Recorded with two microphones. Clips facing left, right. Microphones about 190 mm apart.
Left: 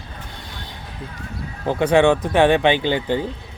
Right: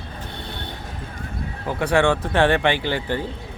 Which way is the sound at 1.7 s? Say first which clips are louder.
Left 4 dB; 20° left (ahead or behind).